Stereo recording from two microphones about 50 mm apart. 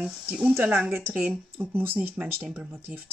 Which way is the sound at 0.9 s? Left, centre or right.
Right.